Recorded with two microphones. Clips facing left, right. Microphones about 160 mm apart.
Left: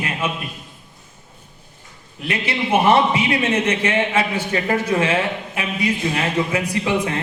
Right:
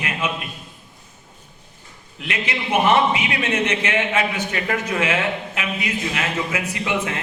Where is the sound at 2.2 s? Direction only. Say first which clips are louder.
Left 3 dB; 30° left (ahead or behind).